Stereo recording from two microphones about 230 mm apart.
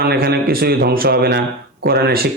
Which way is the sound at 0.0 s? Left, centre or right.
Right.